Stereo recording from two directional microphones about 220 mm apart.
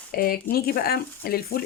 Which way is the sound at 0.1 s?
40° left (ahead or behind).